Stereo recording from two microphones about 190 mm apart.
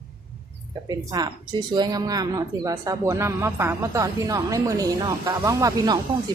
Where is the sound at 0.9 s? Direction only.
20° right (ahead or behind).